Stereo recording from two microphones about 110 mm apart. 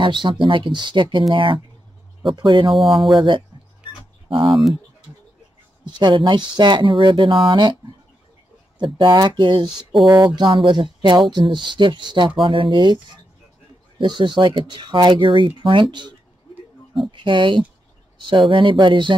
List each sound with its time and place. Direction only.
0.0 s speech: 45° right (ahead or behind)
2.7 s speech: centre (ahead or behind)
3.2 s speech: 45° right (ahead or behind)
4.5 s speech: centre (ahead or behind)
5.9 s speech: 45° right (ahead or behind)
8.7 s speech: 45° right (ahead or behind)